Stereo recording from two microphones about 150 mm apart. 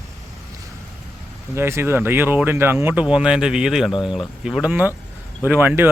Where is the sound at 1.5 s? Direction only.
15° right (ahead or behind).